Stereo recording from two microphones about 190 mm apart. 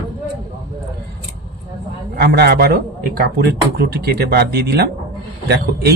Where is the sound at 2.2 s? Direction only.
55° right (ahead or behind).